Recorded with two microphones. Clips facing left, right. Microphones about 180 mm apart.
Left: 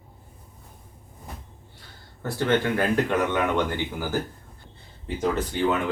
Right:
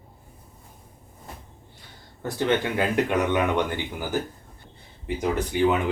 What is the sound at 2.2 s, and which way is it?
Speech, 15° right (ahead or behind).